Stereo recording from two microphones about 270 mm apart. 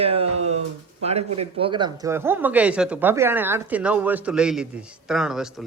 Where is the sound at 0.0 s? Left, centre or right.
Right.